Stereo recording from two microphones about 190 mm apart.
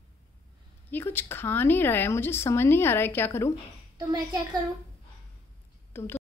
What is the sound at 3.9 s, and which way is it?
Speech, 20° right (ahead or behind).